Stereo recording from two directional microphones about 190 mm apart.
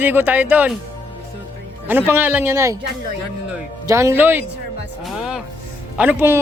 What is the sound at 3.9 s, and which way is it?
Speech, 15° right (ahead or behind).